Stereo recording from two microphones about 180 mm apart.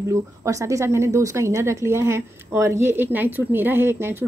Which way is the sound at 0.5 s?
15° right (ahead or behind).